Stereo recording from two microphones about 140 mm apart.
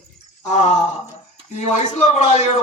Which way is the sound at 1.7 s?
55° left (ahead or behind).